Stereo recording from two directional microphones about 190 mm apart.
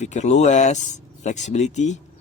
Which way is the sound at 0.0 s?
40° left (ahead or behind).